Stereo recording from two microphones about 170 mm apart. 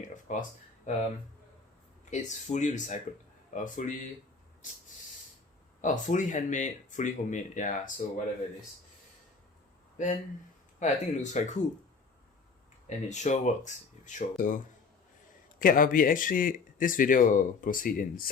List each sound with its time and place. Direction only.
0.3 s speech: 45° left (ahead or behind)
2.0 s speech: 45° left (ahead or behind)
5.8 s speech: 50° left (ahead or behind)
10.8 s speech: 45° left (ahead or behind)
13.1 s speech: 45° left (ahead or behind)